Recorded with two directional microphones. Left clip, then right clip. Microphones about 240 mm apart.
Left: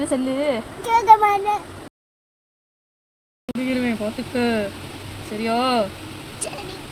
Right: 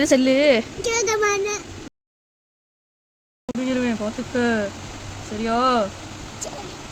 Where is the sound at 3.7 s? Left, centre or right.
Right.